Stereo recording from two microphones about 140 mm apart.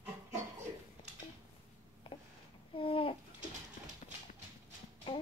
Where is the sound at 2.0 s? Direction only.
40° left (ahead or behind).